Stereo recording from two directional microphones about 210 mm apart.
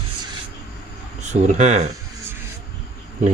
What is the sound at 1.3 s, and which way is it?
Speech, 35° right (ahead or behind).